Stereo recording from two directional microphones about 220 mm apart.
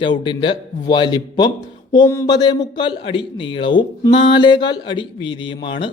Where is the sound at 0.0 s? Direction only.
20° left (ahead or behind).